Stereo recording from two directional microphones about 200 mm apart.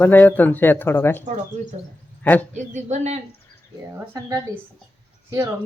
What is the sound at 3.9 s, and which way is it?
Speech, 15° right (ahead or behind).